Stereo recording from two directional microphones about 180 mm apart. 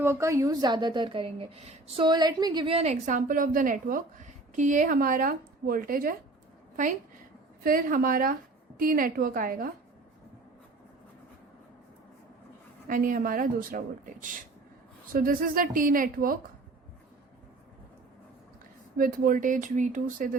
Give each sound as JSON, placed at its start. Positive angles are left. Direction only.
{"t": 0.0, "sound": "a woman's voice", "side_deg": -15}
{"t": 2.7, "sound": "a woman's voice", "side_deg": -40}
{"t": 7.6, "sound": "a woman's voice", "side_deg": -50}
{"t": 12.9, "sound": "a woman's voice", "side_deg": -50}
{"t": 18.9, "sound": "a woman's voice", "side_deg": -50}